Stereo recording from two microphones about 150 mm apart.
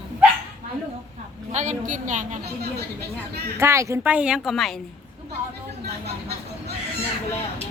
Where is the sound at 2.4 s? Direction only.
90° right.